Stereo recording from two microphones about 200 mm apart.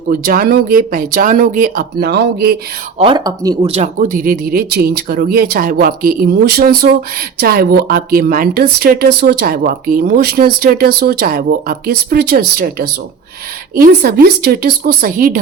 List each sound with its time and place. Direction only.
0.1 s speech: 45° right (ahead or behind)
3.0 s speech: 20° right (ahead or behind)
3.7 s speech: 35° right (ahead or behind)